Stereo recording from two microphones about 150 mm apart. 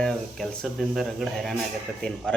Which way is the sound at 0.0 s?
5° left (ahead or behind).